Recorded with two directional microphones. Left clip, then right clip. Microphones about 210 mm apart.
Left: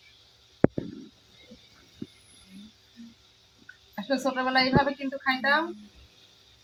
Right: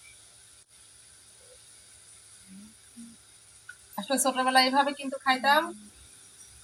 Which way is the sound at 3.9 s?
15° right (ahead or behind).